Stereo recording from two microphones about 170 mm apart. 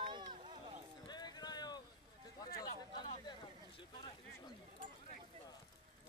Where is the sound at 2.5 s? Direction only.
65° left (ahead or behind).